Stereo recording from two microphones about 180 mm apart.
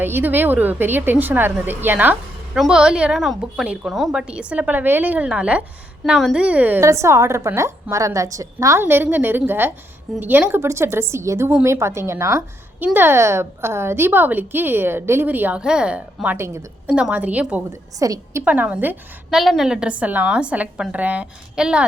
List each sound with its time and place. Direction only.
0.0 s a woman's voice: 10° right (ahead or behind)
18.0 s a woman's voice: 20° right (ahead or behind)
18.4 s a woman's voice: 10° right (ahead or behind)